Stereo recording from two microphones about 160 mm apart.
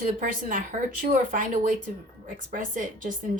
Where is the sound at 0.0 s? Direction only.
60° right (ahead or behind).